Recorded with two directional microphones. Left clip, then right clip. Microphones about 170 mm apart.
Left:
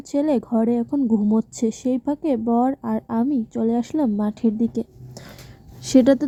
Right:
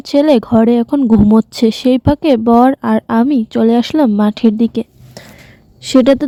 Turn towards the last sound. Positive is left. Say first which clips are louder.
# right 6 dB
turn(degrees=-30)  # may be behind; listen again after turning